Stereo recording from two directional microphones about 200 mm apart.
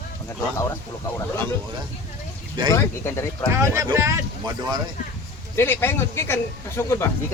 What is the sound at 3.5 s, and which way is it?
Speech, 15° right (ahead or behind).